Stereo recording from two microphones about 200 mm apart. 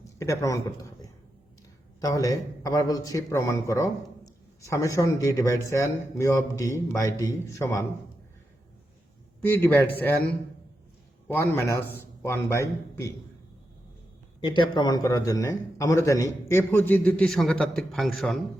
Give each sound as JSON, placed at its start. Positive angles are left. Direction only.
{"t": 0.2, "sound": "a man's voice", "side_deg": 15}
{"t": 2.0, "sound": "a man's voice", "side_deg": 15}
{"t": 9.4, "sound": "a man's voice", "side_deg": 10}
{"t": 11.3, "sound": "a man's voice", "side_deg": 10}
{"t": 14.5, "sound": "a man's voice", "side_deg": 20}